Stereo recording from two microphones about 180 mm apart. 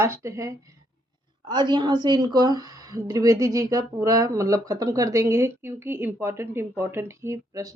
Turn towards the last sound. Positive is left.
turn(degrees=-20)  # may be behind; listen again after turning